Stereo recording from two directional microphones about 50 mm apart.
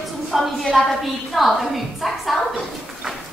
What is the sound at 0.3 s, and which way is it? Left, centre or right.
A man's voice, centre.